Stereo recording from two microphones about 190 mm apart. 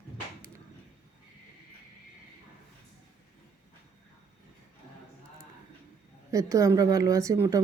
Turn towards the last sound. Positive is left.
turn(degrees=-15)  # may be behind; listen again after turning